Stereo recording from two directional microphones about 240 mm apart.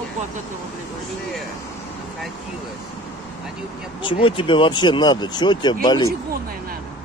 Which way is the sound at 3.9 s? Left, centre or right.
Left.